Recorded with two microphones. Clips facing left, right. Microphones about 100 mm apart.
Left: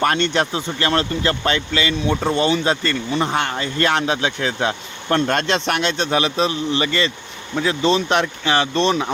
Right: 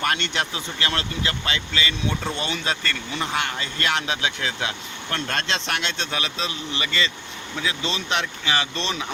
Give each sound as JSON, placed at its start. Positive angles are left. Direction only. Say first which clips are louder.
{"t": 0.0, "sound": "speech", "louder": "left 7 dB", "side_deg": 35}